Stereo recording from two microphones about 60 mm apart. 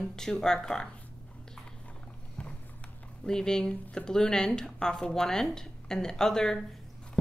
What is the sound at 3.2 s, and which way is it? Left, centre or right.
Speech, centre.